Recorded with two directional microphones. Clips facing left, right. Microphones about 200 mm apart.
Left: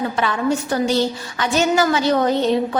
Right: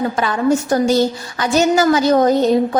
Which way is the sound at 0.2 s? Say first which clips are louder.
Right 4 dB; 40° right (ahead or behind).